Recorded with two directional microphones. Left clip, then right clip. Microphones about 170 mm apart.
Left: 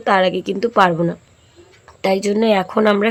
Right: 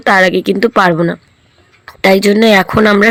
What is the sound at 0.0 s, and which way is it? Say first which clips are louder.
Speech: right 6 dB; 25° right (ahead or behind).